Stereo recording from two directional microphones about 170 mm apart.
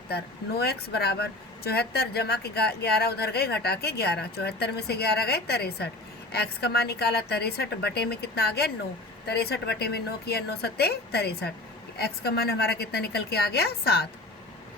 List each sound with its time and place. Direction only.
0.1 s speech: 70° left (ahead or behind)